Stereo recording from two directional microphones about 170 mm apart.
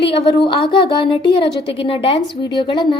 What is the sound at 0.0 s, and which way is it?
A woman's voice, 30° left (ahead or behind).